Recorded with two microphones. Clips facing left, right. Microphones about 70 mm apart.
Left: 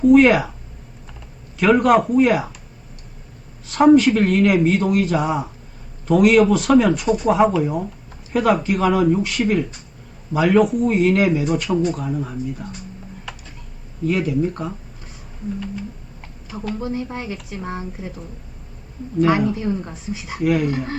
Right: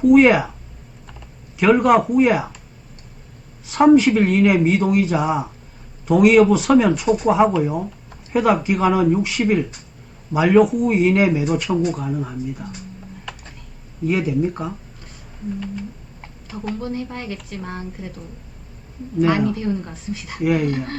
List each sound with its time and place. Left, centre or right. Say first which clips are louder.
0.0 s speech: even; centre
1.5 s speech: even; centre
3.7 s speech: even; centre
13.3 s a sound: right 1 dB; centre
14.1 s speech: even; centre
16.7 s speech: left 2 dB; centre
17.7 s speech: left 3 dB; centre
19.2 s speech: left 1 dB; centre
19.6 s speech: even; centre
20.3 s speech: even; centre